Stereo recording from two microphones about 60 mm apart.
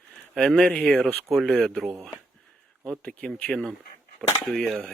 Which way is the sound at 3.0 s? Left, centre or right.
Centre.